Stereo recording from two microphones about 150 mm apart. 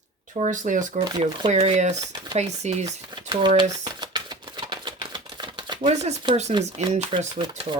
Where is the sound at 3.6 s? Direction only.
25° right (ahead or behind).